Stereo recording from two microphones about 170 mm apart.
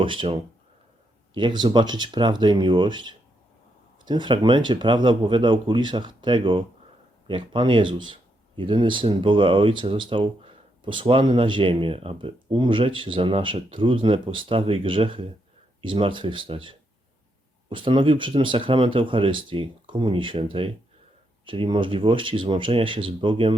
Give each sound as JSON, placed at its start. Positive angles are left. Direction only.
{"t": 0.0, "sound": "speech", "side_deg": -30}
{"t": 1.4, "sound": "speech", "side_deg": -30}